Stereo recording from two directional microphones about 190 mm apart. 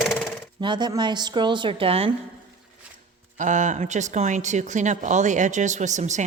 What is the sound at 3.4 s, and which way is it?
Speech, 40° right (ahead or behind).